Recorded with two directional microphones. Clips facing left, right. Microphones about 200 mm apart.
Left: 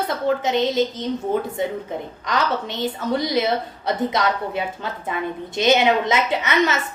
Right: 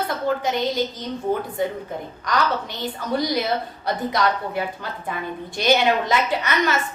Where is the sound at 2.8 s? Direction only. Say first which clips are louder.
Left 1 dB; 25° left (ahead or behind).